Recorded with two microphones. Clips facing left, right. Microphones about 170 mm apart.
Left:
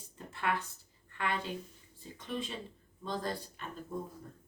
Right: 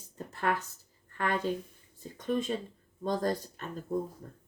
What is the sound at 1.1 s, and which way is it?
Speech, 45° right (ahead or behind).